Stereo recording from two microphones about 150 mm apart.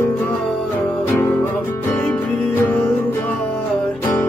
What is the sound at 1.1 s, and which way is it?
Music, 15° left (ahead or behind).